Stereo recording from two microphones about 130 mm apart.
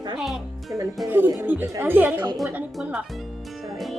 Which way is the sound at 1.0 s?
15° right (ahead or behind).